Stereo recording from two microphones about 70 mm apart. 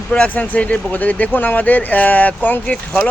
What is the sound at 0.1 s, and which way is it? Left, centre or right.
Speech, centre.